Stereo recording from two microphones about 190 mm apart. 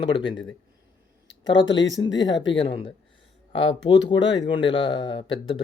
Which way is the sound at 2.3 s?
75° left (ahead or behind).